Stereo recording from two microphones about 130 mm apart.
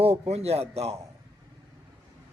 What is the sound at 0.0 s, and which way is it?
Speech, 55° right (ahead or behind).